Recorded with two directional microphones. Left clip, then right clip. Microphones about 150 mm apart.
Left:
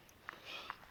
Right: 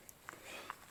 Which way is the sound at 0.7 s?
20° right (ahead or behind).